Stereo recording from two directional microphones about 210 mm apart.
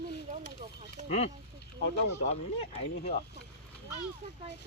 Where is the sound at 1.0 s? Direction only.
30° left (ahead or behind).